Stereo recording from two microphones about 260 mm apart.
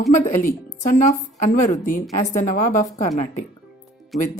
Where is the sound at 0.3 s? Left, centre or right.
Left.